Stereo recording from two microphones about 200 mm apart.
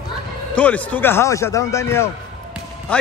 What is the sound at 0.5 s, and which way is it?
A man's voice, 5° left (ahead or behind).